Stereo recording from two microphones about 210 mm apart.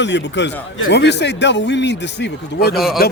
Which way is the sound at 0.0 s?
55° left (ahead or behind).